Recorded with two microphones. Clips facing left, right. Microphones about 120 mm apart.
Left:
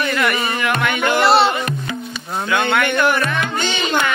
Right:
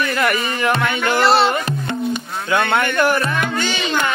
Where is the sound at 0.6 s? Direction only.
30° right (ahead or behind).